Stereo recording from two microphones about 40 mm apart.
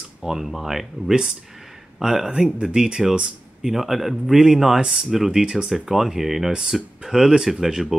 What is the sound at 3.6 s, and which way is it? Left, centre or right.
Speech, centre.